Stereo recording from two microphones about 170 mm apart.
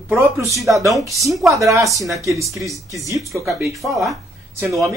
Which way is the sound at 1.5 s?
20° right (ahead or behind).